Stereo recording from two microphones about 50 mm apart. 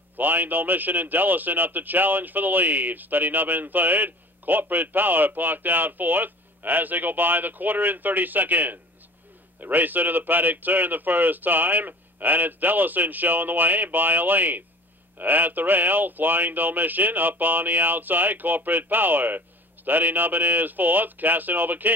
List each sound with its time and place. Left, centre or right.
0.2 s a man's voice: right